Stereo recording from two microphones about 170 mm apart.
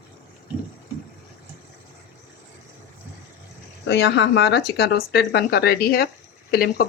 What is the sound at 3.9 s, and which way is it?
Speech, 85° left.